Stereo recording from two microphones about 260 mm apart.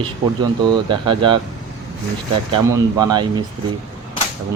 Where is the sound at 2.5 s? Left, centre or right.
Centre.